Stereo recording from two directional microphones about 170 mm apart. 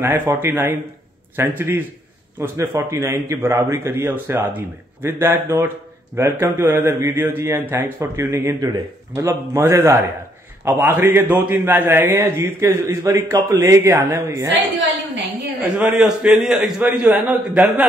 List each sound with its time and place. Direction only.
0.0 s a man's voice: 10° right (ahead or behind)
15.6 s a man's voice: 5° right (ahead or behind)